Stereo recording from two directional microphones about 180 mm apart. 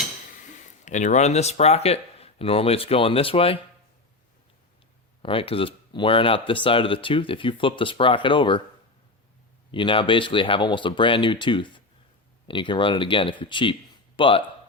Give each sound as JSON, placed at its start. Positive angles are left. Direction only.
{"t": 0.6, "sound": "speech", "side_deg": 45}
{"t": 5.2, "sound": "speech", "side_deg": 30}
{"t": 9.7, "sound": "speech", "side_deg": 30}